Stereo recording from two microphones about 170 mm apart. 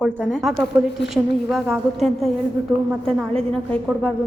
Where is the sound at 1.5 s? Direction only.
Centre (ahead or behind).